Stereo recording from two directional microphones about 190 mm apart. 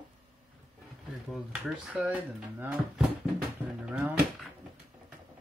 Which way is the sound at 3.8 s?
5° right (ahead or behind).